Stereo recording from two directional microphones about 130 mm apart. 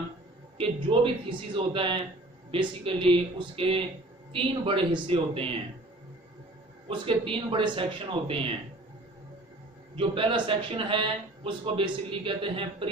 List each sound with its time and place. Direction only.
0.6 s speech: 40° right (ahead or behind)
6.9 s speech: 40° right (ahead or behind)
9.9 s speech: 45° right (ahead or behind)